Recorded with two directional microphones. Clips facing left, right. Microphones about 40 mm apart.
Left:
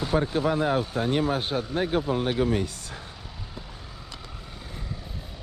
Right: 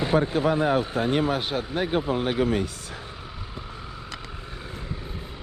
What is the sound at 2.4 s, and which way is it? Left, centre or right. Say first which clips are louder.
Speech: right 1 dB; right.